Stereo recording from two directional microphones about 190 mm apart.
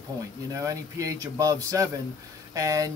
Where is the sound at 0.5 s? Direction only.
15° right (ahead or behind).